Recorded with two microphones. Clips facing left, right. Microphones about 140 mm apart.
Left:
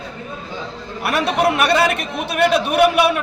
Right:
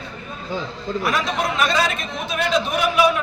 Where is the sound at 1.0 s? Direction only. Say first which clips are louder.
Left 6 dB; 65° left (ahead or behind).